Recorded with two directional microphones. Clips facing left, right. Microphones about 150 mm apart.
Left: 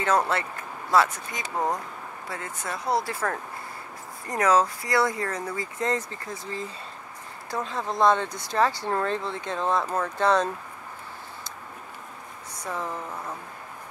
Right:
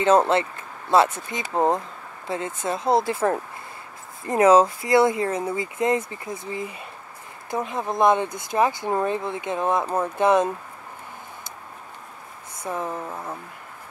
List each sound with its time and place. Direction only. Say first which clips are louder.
0.0 s speech: right 6 dB; 25° right (ahead or behind)
7.5 s speech: right 3 dB; 20° right (ahead or behind)
12.6 s speech: right 3 dB; 15° right (ahead or behind)